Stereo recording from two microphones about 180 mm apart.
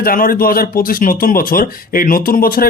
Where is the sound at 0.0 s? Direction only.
50° left (ahead or behind).